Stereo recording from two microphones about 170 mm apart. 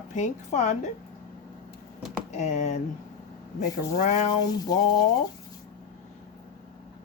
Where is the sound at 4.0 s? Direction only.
45° left (ahead or behind).